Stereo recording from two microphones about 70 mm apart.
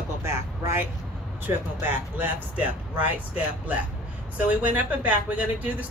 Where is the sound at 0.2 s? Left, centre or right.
Right.